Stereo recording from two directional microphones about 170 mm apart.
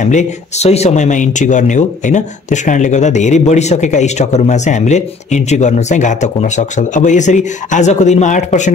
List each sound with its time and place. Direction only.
0.0 s speech: 45° left (ahead or behind)